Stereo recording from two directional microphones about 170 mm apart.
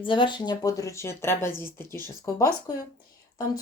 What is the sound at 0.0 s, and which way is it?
Speech, 30° left (ahead or behind).